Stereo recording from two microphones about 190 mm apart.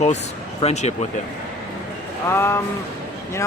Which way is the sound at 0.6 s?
35° left (ahead or behind).